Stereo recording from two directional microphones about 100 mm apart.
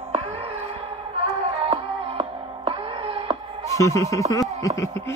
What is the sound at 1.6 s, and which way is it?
Music, 65° right (ahead or behind).